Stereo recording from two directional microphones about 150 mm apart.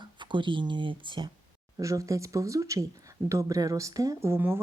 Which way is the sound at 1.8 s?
20° right (ahead or behind).